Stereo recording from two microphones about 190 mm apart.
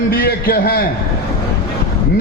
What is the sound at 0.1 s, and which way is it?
Speech, 50° left (ahead or behind).